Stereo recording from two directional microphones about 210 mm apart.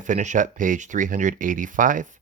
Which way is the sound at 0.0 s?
35° right (ahead or behind).